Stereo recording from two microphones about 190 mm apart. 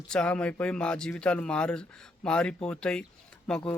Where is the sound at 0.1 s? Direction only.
5° left (ahead or behind).